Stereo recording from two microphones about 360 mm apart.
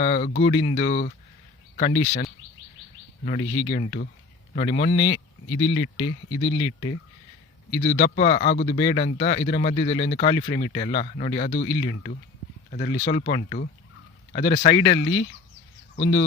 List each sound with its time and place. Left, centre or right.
0.0 s speech: centre
3.4 s speech: left
3.7 s speech: centre
4.9 s speech: left
7.8 s speech: centre
11.7 s speech: left
12.7 s speech: centre
14.9 s speech: left
16.0 s speech: centre